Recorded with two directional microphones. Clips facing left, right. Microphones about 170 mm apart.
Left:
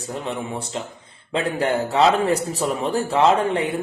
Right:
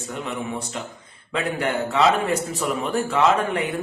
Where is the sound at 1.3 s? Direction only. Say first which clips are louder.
Left 3 dB; 30° left (ahead or behind).